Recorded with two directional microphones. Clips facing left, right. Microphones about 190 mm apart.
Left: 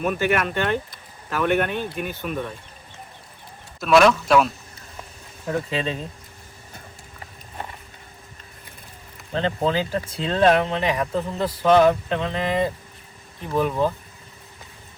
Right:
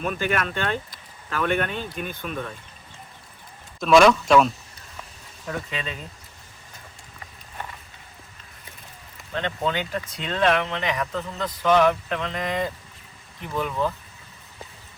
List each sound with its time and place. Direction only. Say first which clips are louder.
0.0 s speech: left 4 dB; 5° left (ahead or behind)
3.8 s a man's voice: right 1 dB; centre (ahead or behind)
5.5 s speech: left 6 dB; 30° left (ahead or behind)
9.3 s speech: left 4 dB; 30° left (ahead or behind)